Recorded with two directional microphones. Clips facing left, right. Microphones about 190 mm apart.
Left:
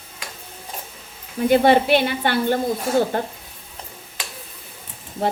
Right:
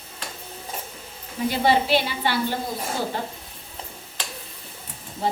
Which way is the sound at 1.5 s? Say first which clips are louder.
Left 6 dB; 55° left (ahead or behind).